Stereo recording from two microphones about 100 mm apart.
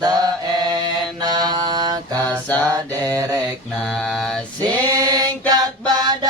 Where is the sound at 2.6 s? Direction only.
40° right (ahead or behind).